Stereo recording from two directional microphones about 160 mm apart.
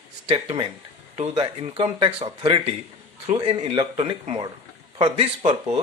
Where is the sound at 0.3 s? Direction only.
30° right (ahead or behind).